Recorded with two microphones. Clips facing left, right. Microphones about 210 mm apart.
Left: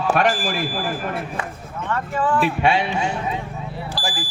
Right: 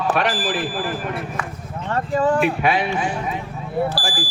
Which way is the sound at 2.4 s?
30° left (ahead or behind).